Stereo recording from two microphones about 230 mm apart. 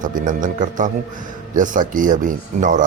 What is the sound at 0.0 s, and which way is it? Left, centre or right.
Speech, right.